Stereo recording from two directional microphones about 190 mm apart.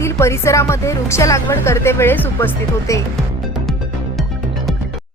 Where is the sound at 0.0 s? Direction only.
15° left (ahead or behind).